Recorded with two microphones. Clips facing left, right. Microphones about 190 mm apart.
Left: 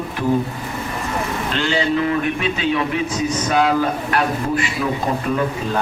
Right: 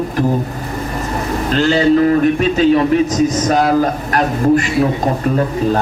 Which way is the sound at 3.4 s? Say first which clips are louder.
Left 1 dB; 40° right (ahead or behind).